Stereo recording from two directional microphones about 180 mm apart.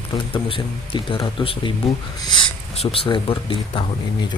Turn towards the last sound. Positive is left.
turn(degrees=30)  # may be behind; listen again after turning